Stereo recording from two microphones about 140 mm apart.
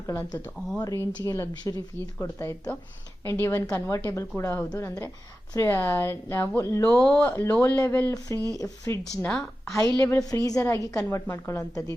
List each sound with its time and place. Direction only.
0.1 s speech: 15° left (ahead or behind)
7.0 s speech: 10° left (ahead or behind); by 9.0 s 25° left (ahead or behind)
9.1 s speech: 5° left (ahead or behind)
10.0 s speech: 20° left (ahead or behind)